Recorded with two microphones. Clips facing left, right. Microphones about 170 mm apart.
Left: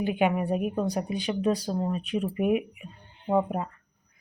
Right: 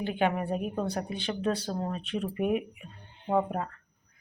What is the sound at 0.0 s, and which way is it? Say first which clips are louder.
Speech: left 3 dB; 10° left (ahead or behind).